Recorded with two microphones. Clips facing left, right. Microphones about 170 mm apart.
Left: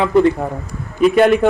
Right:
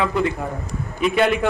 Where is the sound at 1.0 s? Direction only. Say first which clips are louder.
Left 7 dB; 45° left (ahead or behind).